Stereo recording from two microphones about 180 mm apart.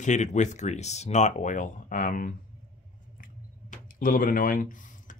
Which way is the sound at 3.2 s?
50° left (ahead or behind).